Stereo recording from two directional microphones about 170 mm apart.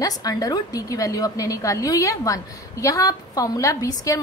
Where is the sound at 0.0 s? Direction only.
20° left (ahead or behind).